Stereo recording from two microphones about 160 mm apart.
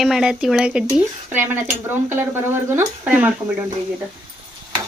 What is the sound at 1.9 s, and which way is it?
Speech, 15° right (ahead or behind).